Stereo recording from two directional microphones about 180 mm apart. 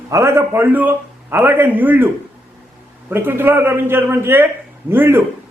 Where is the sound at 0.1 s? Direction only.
15° right (ahead or behind).